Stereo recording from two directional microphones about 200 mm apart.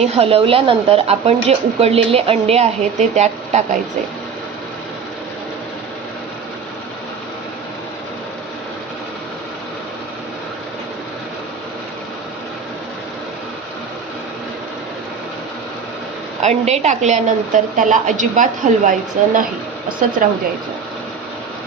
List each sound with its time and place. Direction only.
0.0 s a woman's voice: 30° right (ahead or behind)
16.4 s a woman's voice: 35° right (ahead or behind)